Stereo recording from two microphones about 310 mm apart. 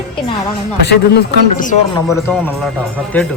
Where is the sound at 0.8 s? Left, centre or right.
Left.